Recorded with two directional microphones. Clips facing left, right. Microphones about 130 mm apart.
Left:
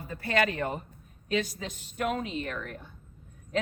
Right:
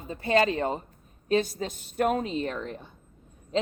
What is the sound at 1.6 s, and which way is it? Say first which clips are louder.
A woman's voice: right 6 dB; 45° right (ahead or behind).